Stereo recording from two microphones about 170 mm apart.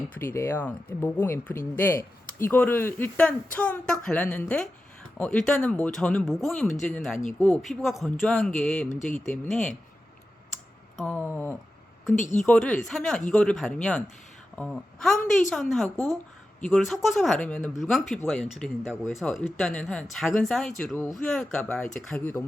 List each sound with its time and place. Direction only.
0.1 s speech: 15° left (ahead or behind)
8.9 s speech: 45° left (ahead or behind)
9.3 s speech: 5° left (ahead or behind)
10.9 s a sound: 5° left (ahead or behind)
12.1 s speech: 45° left (ahead or behind)
12.5 s speech: 5° left (ahead or behind)